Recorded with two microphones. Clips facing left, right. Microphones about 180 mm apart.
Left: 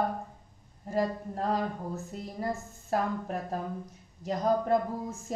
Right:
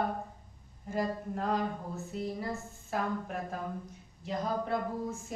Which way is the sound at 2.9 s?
40° left (ahead or behind).